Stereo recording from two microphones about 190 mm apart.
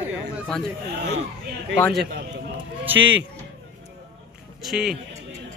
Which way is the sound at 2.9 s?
10° right (ahead or behind).